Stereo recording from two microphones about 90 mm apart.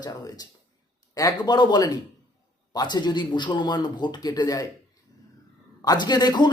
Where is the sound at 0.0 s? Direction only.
45° left (ahead or behind).